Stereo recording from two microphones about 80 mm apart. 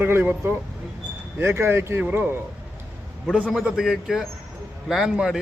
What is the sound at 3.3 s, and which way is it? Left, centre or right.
A man's voice, centre.